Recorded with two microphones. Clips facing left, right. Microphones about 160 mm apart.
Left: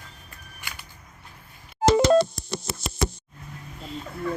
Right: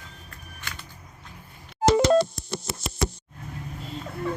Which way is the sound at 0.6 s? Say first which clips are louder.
Right 1 dB; 10° left (ahead or behind).